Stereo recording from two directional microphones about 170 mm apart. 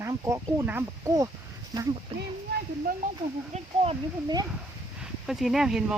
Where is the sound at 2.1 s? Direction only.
35° right (ahead or behind).